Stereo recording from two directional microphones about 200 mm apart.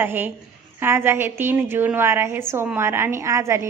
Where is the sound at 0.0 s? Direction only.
10° right (ahead or behind).